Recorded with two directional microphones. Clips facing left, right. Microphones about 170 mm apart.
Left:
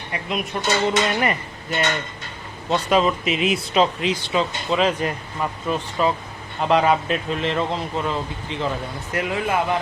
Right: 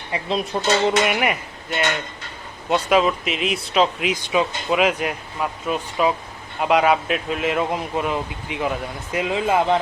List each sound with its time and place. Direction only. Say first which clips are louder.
0.1 s speech: right 3 dB; 30° right (ahead or behind)
0.9 s speech: right 1 dB; 10° right (ahead or behind)
4.0 s speech: right 1 dB; 15° right (ahead or behind)